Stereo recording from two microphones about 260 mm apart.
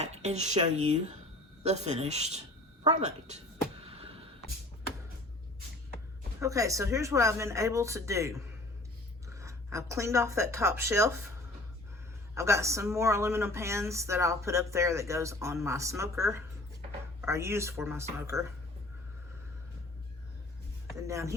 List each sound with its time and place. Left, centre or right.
0.0 s speech: right
2.8 s a sound: right
6.4 s speech: centre
12.3 s speech: centre
21.1 s speech: centre